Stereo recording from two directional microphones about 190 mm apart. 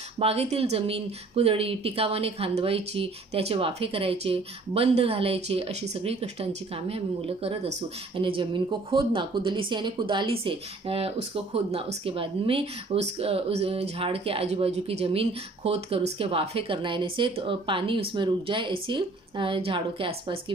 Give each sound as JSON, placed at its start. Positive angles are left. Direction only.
{"t": 0.2, "sound": "speech", "side_deg": -30}